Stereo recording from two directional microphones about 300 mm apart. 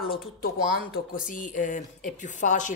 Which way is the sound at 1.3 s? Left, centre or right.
Left.